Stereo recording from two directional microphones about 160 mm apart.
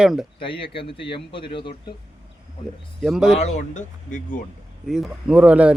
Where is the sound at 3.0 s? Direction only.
5° right (ahead or behind).